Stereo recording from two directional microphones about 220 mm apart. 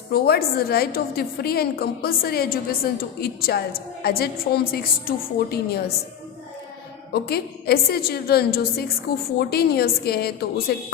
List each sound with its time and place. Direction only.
0.1 s a woman's voice: 45° left (ahead or behind)
7.1 s a woman's voice: 45° left (ahead or behind)